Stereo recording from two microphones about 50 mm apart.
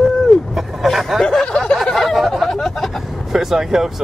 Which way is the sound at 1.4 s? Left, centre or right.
Centre.